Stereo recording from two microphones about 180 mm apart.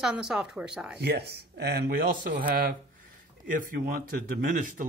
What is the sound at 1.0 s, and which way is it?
Speech, 65° right (ahead or behind).